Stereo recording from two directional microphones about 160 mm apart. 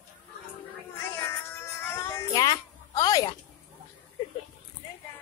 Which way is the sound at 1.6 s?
15° left (ahead or behind).